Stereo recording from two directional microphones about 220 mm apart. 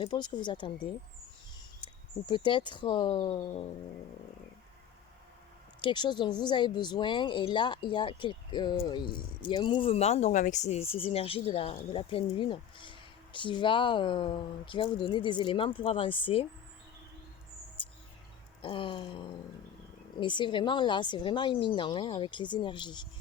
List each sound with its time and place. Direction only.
0.0 s speech: 20° left (ahead or behind)
5.8 s speech: 20° left (ahead or behind)
18.6 s speech: 25° left (ahead or behind)